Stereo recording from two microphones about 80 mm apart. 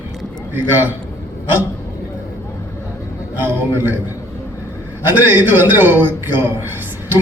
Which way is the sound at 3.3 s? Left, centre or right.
Right.